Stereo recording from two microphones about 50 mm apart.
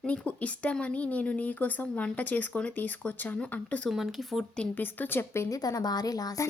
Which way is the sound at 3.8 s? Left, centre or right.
Centre.